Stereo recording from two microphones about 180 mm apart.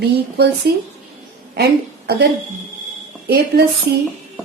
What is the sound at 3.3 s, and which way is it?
Speech, 65° right (ahead or behind).